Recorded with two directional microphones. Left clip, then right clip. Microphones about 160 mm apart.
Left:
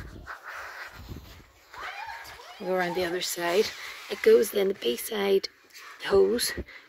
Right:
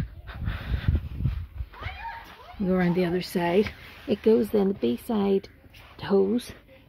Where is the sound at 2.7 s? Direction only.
5° right (ahead or behind).